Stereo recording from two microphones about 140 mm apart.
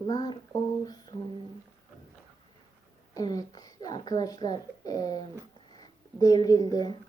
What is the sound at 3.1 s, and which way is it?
Speech, 25° left (ahead or behind).